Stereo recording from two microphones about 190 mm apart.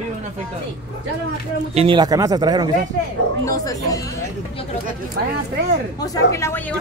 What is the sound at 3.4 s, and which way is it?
Speech, 20° left (ahead or behind).